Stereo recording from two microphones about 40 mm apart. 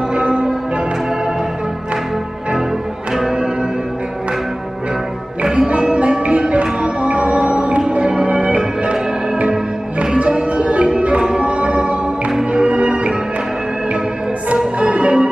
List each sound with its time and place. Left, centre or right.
0.1 s music: right
3.2 s music: centre
5.4 s music: right
14.8 s organ: right